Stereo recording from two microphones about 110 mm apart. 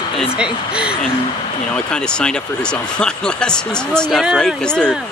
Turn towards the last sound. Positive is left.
turn(degrees=10)  # may be behind; listen again after turning